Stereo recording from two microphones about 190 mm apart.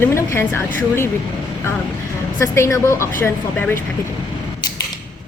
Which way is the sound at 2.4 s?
15° left (ahead or behind).